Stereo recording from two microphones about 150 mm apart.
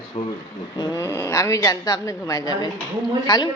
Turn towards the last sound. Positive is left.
turn(degrees=25)  # may be behind; listen again after turning